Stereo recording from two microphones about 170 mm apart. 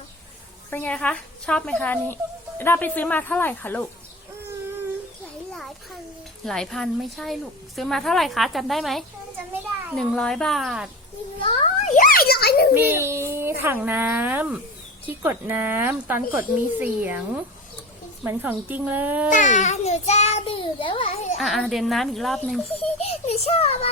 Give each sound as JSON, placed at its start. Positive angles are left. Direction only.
{"t": 0.7, "sound": "a woman's voice", "side_deg": 10}
{"t": 5.5, "sound": "a sound", "side_deg": 0}
{"t": 6.4, "sound": "a child's voice", "side_deg": 5}
{"t": 11.3, "sound": "children playing", "side_deg": 35}
{"t": 11.9, "sound": "children playing", "side_deg": 55}
{"t": 12.7, "sound": "child singing", "side_deg": -10}
{"t": 13.6, "sound": "speech", "side_deg": -10}
{"t": 18.3, "sound": "speech", "side_deg": -10}
{"t": 19.3, "sound": "a child's voice", "side_deg": 45}
{"t": 21.3, "sound": "a child's voice", "side_deg": 0}
{"t": 22.7, "sound": "a child's voice", "side_deg": 35}